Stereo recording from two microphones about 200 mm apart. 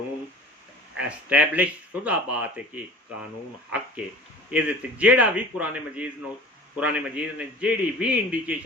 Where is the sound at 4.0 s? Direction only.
5° right (ahead or behind).